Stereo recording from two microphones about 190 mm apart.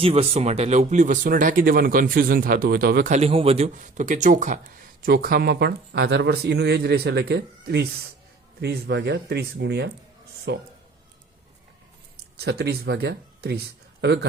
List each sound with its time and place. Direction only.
0.0 s speech: 30° right (ahead or behind); by 3.1 s 55° right (ahead or behind)
3.1 s speech: 30° right (ahead or behind)
5.0 s speech: 55° right (ahead or behind)
12.4 s speech: 60° right (ahead or behind)